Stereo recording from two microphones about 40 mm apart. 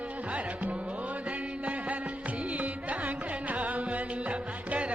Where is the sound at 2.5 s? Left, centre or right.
Right.